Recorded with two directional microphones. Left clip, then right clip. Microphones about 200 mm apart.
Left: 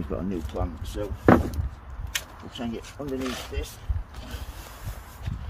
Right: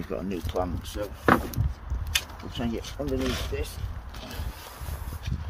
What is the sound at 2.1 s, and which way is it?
Speech, 20° right (ahead or behind).